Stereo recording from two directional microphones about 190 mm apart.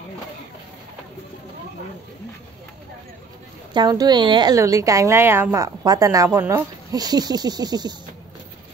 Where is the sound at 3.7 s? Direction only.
20° right (ahead or behind).